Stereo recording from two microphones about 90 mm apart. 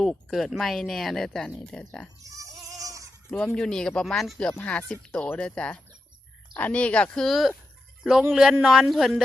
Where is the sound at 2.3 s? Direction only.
35° right (ahead or behind).